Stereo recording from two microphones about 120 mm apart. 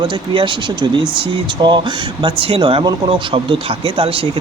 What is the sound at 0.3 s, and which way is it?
Speech, 40° right (ahead or behind).